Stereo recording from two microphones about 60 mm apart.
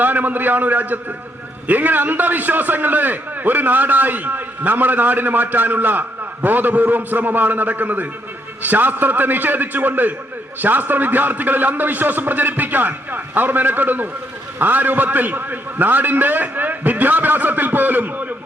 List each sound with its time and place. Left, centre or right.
0.0 s a man's voice: right